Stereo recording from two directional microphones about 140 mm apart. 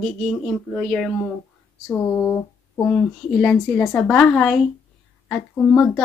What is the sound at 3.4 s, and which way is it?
Speech, 5° left (ahead or behind).